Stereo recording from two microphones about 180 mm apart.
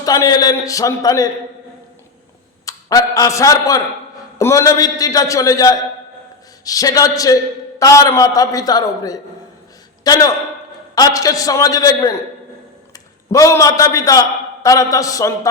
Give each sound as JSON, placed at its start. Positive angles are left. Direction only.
{"t": 0.0, "sound": "a man's voice", "side_deg": 20}
{"t": 2.6, "sound": "a man's voice", "side_deg": 20}
{"t": 13.3, "sound": "a man's voice", "side_deg": 20}